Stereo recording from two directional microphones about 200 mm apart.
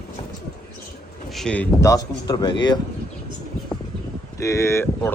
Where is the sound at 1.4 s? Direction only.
5° left (ahead or behind); by 2.7 s 20° left (ahead or behind).